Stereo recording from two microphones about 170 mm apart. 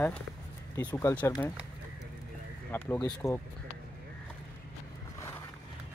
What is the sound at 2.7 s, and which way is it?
Speech, 15° left (ahead or behind).